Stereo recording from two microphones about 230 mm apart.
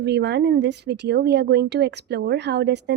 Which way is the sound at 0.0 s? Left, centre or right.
Right.